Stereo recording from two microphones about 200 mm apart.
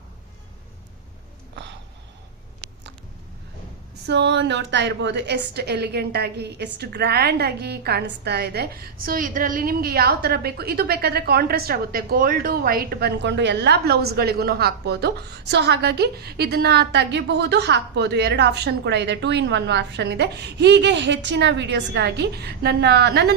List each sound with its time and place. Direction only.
4.0 s a woman's voice: 60° right (ahead or behind)